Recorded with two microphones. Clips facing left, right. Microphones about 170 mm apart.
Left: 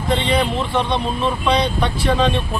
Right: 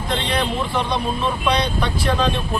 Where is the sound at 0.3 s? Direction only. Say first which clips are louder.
Left 3 dB; centre (ahead or behind).